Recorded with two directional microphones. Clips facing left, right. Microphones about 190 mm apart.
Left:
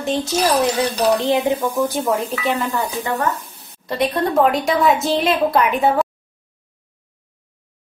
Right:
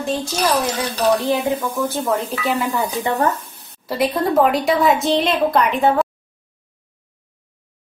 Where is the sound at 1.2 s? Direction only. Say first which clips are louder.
Left 2 dB; 20° left (ahead or behind).